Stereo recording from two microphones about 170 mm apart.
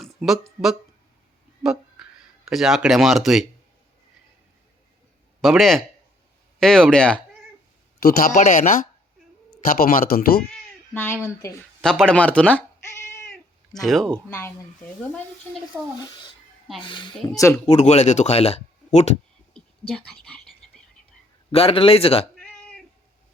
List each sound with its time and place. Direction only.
0.0 s speech: centre (ahead or behind)
5.4 s speech: centre (ahead or behind)
8.0 s speech: 50° left (ahead or behind)
10.9 s speech: 15° left (ahead or behind)
11.8 s cat: 5° left (ahead or behind)
13.7 s speech: centre (ahead or behind)
14.3 s speech: 15° left (ahead or behind)
16.8 s speech: 30° left (ahead or behind)
17.7 s speech: 40° left (ahead or behind)
19.9 s whispering: 5° left (ahead or behind)
21.5 s speech: 35° left (ahead or behind)
22.4 s cat: 5° left (ahead or behind)